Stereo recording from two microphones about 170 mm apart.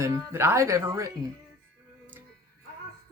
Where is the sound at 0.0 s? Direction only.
15° right (ahead or behind).